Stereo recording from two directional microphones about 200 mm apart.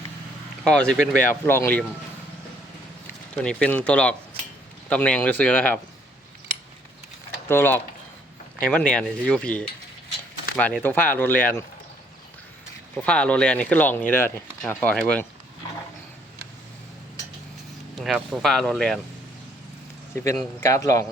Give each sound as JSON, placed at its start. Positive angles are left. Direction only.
{"t": 0.6, "sound": "speech", "side_deg": 5}
{"t": 3.4, "sound": "speech", "side_deg": 5}
{"t": 7.4, "sound": "speech", "side_deg": 10}
{"t": 12.9, "sound": "speech", "side_deg": 5}
{"t": 18.0, "sound": "speech", "side_deg": 0}
{"t": 20.1, "sound": "speech", "side_deg": 15}